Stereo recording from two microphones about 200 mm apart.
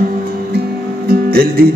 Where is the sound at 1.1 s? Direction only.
50° right (ahead or behind).